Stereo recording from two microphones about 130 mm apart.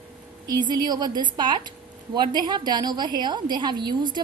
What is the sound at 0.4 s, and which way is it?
A woman's voice, 35° right (ahead or behind).